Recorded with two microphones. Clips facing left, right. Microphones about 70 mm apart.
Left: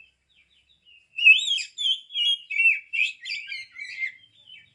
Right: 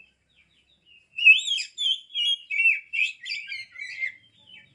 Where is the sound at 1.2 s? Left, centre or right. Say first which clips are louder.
Even; centre.